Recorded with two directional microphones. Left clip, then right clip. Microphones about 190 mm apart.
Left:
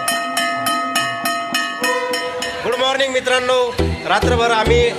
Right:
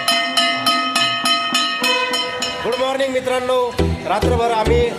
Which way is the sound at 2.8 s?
15° right (ahead or behind).